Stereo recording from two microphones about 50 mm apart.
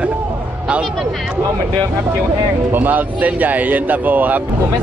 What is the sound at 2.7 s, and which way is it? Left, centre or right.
Speech, right.